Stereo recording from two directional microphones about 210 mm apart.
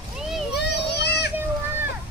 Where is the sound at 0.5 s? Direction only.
50° left (ahead or behind).